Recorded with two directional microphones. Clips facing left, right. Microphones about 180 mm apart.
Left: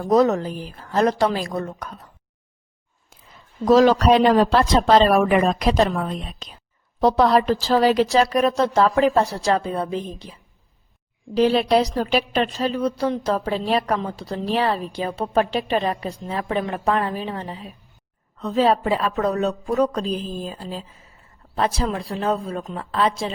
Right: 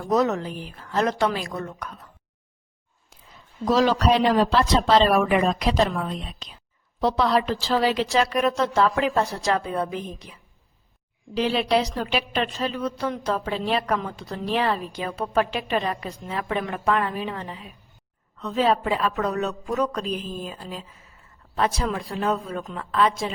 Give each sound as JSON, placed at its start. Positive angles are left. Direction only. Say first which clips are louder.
{"t": 0.0, "sound": "a woman's voice", "louder": "left 5 dB", "side_deg": 35}
{"t": 3.7, "sound": "a man's voice", "louder": "left 5 dB", "side_deg": 50}